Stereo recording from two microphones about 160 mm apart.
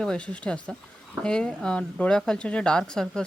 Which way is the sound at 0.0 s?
5° left (ahead or behind).